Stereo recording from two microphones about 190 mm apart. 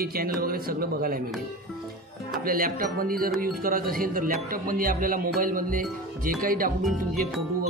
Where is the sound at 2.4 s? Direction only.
50° right (ahead or behind).